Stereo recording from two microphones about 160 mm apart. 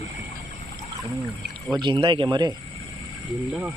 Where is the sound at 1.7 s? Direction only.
30° right (ahead or behind).